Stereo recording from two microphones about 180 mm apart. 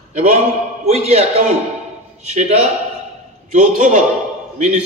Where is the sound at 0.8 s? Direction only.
35° right (ahead or behind).